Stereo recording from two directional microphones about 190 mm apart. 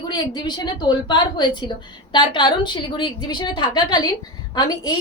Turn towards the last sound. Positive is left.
turn(degrees=20)  # may be behind; listen again after turning